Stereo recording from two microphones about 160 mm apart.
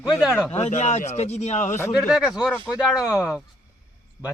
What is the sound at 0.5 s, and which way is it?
A man's voice, 45° left (ahead or behind).